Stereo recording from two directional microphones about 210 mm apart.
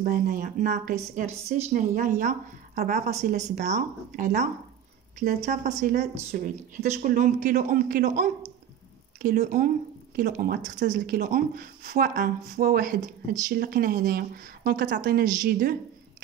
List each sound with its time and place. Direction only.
0.0 s a woman's voice: 45° right (ahead or behind)
5.4 s a woman's voice: 35° right (ahead or behind)